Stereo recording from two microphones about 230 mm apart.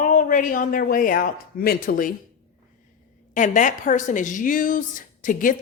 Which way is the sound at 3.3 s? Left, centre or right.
Left.